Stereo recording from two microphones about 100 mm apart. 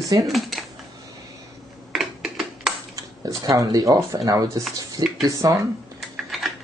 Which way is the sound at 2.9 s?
35° right (ahead or behind).